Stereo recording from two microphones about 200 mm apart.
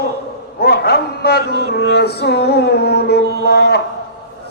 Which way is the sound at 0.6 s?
55° left (ahead or behind).